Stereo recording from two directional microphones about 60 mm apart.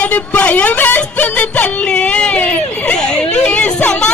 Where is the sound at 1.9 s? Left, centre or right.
Centre.